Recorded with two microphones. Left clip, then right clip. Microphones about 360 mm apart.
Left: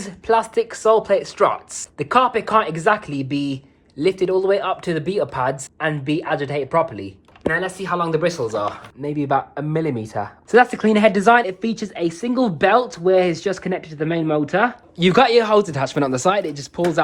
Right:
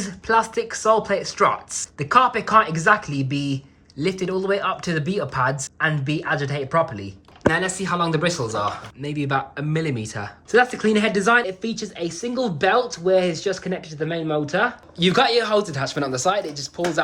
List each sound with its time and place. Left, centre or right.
0.0 s speech: centre